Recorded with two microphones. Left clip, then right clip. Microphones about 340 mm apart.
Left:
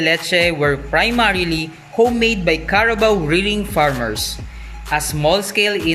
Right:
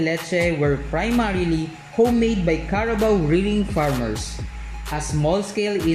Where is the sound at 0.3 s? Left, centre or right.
Left.